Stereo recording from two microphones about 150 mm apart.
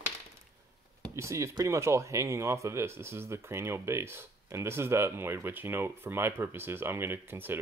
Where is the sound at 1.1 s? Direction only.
20° right (ahead or behind).